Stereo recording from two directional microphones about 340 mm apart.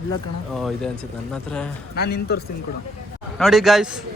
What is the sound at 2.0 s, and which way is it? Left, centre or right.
Speech, left.